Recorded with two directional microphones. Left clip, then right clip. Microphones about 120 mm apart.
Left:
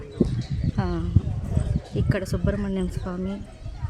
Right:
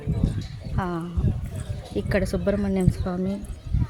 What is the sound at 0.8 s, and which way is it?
Speech, 35° left (ahead or behind).